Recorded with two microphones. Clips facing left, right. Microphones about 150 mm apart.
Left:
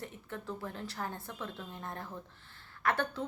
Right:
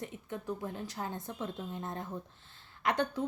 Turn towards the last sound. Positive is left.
turn(degrees=-20)  # may be behind; listen again after turning